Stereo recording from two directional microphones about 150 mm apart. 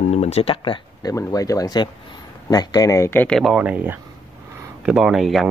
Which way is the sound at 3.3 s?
5° right (ahead or behind).